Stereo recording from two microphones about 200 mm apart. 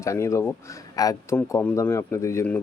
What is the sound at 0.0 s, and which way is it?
Speech, 15° left (ahead or behind).